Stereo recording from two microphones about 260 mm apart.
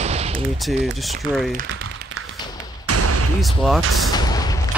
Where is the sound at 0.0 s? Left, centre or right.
Right.